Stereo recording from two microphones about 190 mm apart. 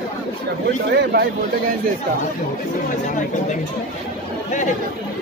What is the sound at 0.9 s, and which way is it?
Speech, 60° right (ahead or behind).